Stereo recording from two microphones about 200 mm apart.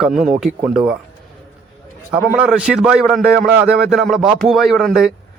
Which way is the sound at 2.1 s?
5° right (ahead or behind).